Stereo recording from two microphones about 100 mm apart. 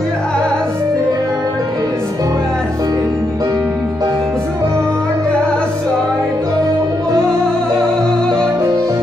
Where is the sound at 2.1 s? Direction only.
35° right (ahead or behind).